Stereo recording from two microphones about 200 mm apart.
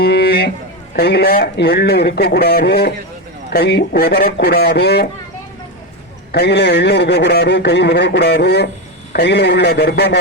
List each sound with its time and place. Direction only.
0.0 s a sound: 55° left (ahead or behind)
0.9 s speech: 55° left (ahead or behind)
6.3 s speech: 55° left (ahead or behind)